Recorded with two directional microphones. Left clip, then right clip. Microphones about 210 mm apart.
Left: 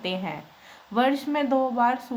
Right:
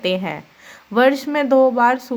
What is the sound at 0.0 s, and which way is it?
Speech, 30° right (ahead or behind).